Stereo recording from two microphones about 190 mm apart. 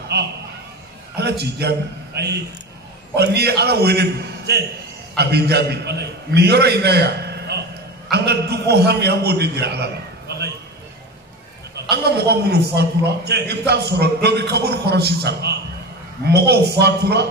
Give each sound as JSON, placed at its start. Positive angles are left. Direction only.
{"t": 0.1, "sound": "a man's voice", "side_deg": -60}
{"t": 11.9, "sound": "a man's voice", "side_deg": -60}